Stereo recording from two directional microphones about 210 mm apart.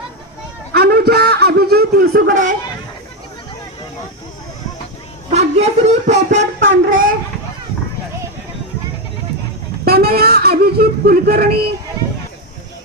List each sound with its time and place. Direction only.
0.7 s speech: 50° right (ahead or behind)
5.3 s speech: 30° right (ahead or behind)
6.9 s a sound: 40° right (ahead or behind)
9.8 s speech: 50° right (ahead or behind)